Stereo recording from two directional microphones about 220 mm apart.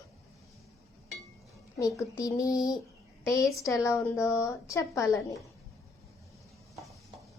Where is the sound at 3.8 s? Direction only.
15° left (ahead or behind).